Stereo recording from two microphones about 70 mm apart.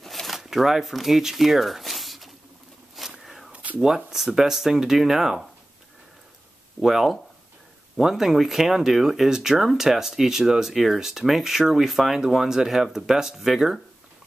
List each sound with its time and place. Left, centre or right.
0.0 s shuffling cards: centre
3.0 s walk: centre
3.5 s a sound: right
3.8 s speech: centre
6.8 s speech: centre